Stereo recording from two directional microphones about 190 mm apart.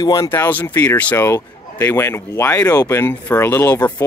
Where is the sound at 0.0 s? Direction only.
20° left (ahead or behind).